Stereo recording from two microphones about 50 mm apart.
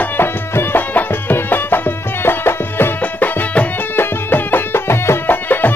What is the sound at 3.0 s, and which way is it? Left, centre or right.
Music, left.